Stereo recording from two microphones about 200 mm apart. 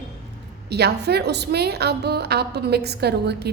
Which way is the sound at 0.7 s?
55° right (ahead or behind).